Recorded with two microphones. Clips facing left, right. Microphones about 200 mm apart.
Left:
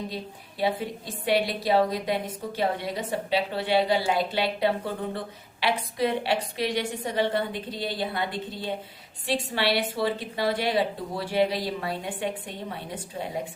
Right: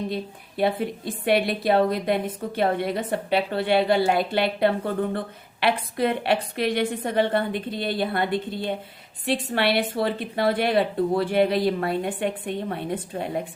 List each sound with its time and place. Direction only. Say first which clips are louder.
0.1 s a woman's voice: right 6 dB; 55° right (ahead or behind)